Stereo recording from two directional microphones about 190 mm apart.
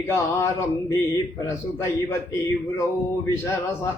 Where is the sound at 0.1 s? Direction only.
15° left (ahead or behind).